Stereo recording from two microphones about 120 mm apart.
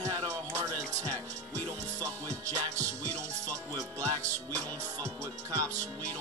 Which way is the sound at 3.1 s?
10° left (ahead or behind).